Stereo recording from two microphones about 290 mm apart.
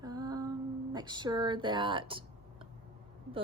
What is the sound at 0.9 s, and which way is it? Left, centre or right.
Speech, centre.